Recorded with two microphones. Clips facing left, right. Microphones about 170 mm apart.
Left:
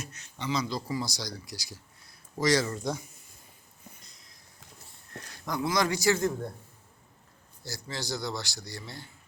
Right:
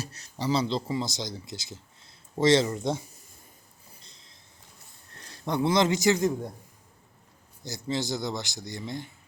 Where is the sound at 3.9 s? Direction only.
30° right (ahead or behind).